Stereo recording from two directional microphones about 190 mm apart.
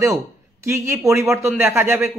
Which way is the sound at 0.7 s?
15° right (ahead or behind).